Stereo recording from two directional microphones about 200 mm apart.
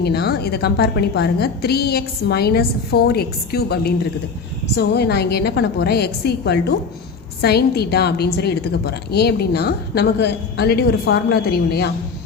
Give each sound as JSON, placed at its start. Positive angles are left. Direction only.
{"t": 0.0, "sound": "a woman's voice", "side_deg": 55}